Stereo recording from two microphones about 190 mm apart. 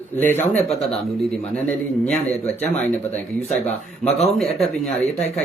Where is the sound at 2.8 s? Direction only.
10° left (ahead or behind).